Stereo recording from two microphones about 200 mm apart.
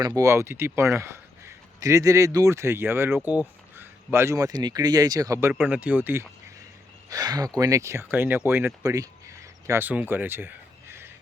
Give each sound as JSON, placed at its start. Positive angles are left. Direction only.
{"t": 0.0, "sound": "speech", "side_deg": -15}